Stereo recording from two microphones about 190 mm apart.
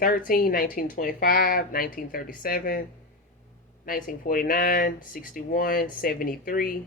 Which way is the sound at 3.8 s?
45° left (ahead or behind).